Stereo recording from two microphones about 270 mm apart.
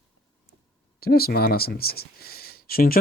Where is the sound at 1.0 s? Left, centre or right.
Left.